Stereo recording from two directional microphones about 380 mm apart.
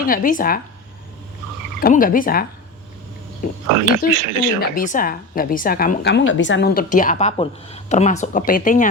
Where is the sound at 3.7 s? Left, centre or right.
Right.